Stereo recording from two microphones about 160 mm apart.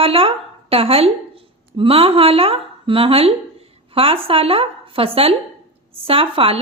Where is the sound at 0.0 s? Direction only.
35° right (ahead or behind).